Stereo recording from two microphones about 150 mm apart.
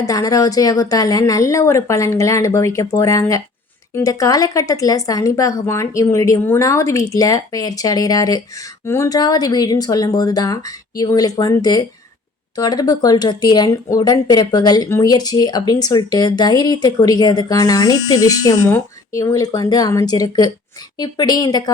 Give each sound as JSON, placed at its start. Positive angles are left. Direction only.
{"t": 0.0, "sound": "speech", "side_deg": 25}